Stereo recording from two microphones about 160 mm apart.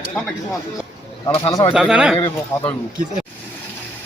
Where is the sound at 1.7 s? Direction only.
5° right (ahead or behind).